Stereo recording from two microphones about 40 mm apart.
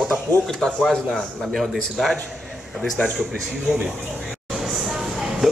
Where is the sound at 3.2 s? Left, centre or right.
Centre.